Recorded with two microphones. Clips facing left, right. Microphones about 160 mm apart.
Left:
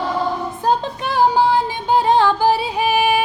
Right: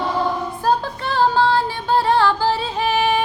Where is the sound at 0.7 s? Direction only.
15° left (ahead or behind).